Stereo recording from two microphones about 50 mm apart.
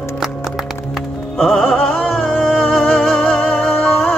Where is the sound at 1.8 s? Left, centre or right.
Left.